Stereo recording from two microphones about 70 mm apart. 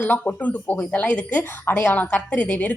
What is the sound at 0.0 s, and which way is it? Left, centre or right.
A woman's voice, left.